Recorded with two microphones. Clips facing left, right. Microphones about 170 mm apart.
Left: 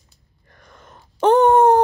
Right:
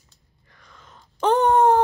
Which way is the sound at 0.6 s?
50° left (ahead or behind).